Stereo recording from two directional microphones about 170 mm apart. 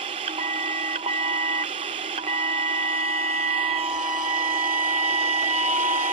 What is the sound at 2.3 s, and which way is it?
Steam whistle, 45° right (ahead or behind).